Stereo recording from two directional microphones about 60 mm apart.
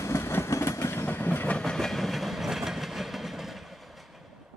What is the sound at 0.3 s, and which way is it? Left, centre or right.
Train, left.